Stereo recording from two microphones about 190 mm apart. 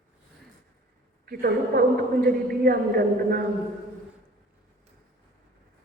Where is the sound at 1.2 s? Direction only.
50° right (ahead or behind).